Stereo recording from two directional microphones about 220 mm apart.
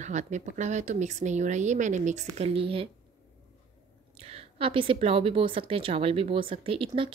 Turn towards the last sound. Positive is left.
turn(degrees=-25)  # may be behind; listen again after turning